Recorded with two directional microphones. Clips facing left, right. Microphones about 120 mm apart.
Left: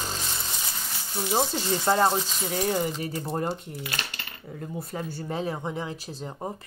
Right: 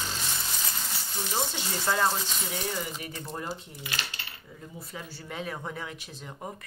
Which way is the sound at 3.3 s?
55° left (ahead or behind).